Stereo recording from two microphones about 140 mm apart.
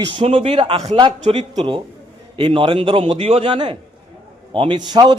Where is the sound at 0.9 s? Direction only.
35° right (ahead or behind).